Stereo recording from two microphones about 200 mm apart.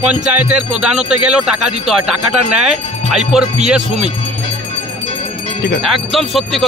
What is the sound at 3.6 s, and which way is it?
Speech, 5° right (ahead or behind).